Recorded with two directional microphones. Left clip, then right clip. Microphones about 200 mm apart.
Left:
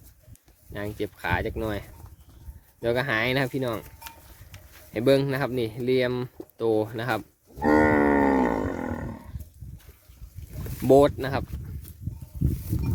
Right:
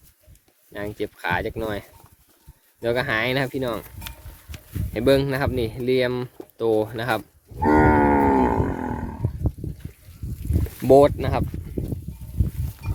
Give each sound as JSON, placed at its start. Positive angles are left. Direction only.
{"t": 0.7, "sound": "speech", "side_deg": 0}
{"t": 4.9, "sound": "speech", "side_deg": 0}
{"t": 7.6, "sound": "livestock", "side_deg": 35}
{"t": 10.8, "sound": "speech", "side_deg": 0}